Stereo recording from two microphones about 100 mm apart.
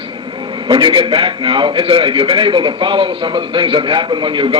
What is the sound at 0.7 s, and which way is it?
A man's voice, 55° right (ahead or behind).